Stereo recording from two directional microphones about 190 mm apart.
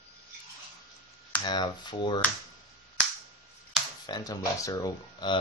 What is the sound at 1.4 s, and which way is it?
Speech, 25° left (ahead or behind).